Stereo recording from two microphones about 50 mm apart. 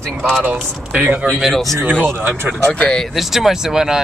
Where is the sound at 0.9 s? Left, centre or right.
Right.